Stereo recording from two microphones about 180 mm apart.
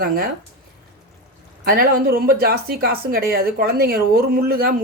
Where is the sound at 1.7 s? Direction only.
60° right (ahead or behind).